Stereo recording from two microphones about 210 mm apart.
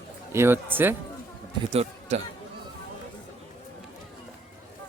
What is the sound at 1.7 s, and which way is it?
Speech, 30° right (ahead or behind).